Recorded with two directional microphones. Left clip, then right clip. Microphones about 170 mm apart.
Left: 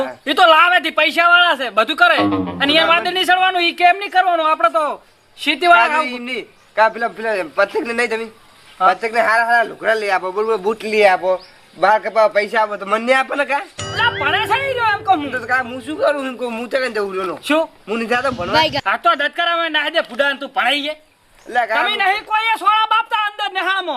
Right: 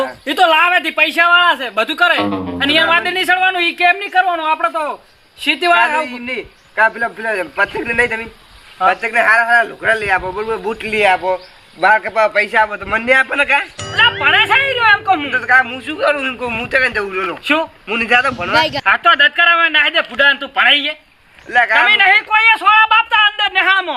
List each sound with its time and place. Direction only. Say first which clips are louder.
0.3 s speech: left 1 dB; 5° left (ahead or behind)
2.0 s speech: even; centre (ahead or behind)
4.1 s speech: even; 15° left (ahead or behind)
4.6 s speech: left 2 dB; centre (ahead or behind)
6.7 s a man's voice: right 1 dB; 30° left (ahead or behind)
13.7 s speech: right 5 dB; centre (ahead or behind)
15.4 s a man's voice: right 7 dB; 25° left (ahead or behind)
17.4 s speech: right 1 dB; 15° left (ahead or behind)
17.8 s a man's voice: right 5 dB; 30° left (ahead or behind)
18.3 s speech: right 2 dB; centre (ahead or behind)
18.9 s speech: right 5 dB; 15° left (ahead or behind)